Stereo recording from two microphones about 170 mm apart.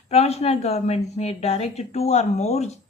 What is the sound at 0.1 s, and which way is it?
A woman's voice, 40° left (ahead or behind).